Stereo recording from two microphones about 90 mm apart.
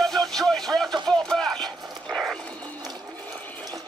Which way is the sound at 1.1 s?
10° left (ahead or behind).